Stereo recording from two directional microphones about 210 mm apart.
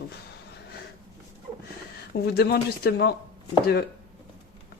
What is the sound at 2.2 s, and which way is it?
Speech, 50° left (ahead or behind).